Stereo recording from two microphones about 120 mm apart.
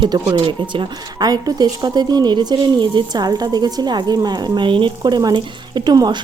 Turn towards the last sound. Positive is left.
turn(degrees=-35)  # may be behind; listen again after turning